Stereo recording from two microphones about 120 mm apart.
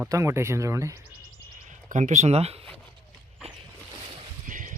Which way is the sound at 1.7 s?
90° right.